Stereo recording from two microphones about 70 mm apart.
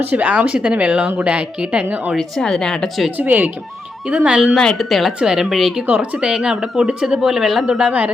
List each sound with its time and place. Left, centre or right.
0.0 s speech: right
2.1 s speech: centre
3.2 s speech: right
4.0 s speech: centre
4.5 s speech: centre
5.8 s speech: right